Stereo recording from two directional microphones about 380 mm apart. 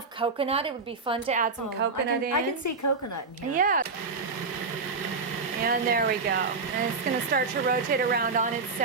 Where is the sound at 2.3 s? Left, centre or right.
Left.